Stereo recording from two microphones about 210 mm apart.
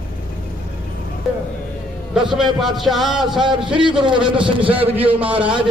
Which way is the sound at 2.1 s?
Centre (ahead or behind).